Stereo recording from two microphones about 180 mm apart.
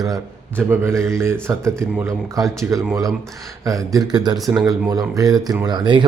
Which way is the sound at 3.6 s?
20° right (ahead or behind).